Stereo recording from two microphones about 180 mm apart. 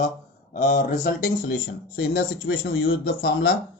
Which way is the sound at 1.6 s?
60° left (ahead or behind).